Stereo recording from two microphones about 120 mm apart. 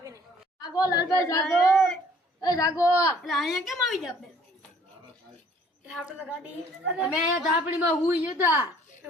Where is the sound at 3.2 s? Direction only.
Centre (ahead or behind).